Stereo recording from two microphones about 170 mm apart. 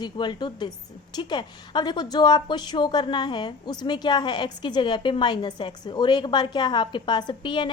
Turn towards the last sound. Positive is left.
turn(degrees=30)  # may be behind; listen again after turning